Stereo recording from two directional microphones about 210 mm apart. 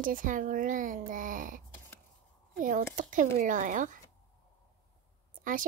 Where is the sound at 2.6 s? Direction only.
40° right (ahead or behind).